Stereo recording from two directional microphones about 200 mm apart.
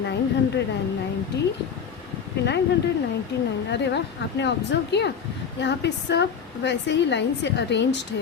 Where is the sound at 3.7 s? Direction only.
60° left (ahead or behind).